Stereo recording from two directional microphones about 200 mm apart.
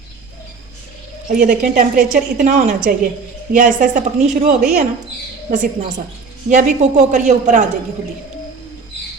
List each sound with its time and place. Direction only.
1.4 s a woman's voice: 40° right (ahead or behind)